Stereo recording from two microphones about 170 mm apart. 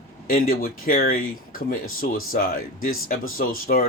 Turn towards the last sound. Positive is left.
turn(degrees=60)  # may be behind; listen again after turning